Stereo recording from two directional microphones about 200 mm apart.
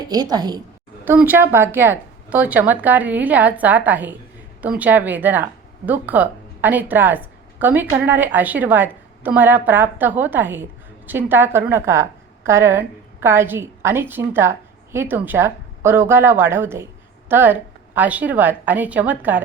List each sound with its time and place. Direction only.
0.0 s a woman's voice: 20° right (ahead or behind)